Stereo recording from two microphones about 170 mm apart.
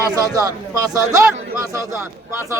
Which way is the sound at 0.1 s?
20° right (ahead or behind).